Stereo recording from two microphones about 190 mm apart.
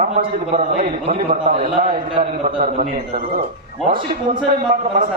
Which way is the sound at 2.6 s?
45° right (ahead or behind).